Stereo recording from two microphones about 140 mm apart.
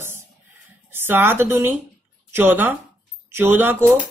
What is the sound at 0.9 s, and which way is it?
Speech, 15° right (ahead or behind).